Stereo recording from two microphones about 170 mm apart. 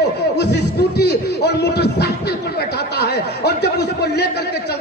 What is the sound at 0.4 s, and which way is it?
Music, 80° left.